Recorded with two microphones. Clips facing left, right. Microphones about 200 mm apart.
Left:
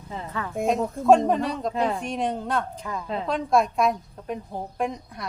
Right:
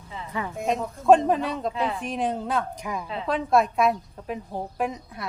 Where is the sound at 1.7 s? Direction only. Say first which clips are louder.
Left 3 dB; 40° left (ahead or behind).